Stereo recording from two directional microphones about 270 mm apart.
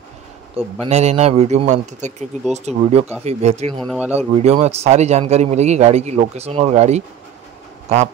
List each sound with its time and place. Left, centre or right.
0.6 s a man's voice: right
3.8 s speech: centre
4.4 s a man's voice: right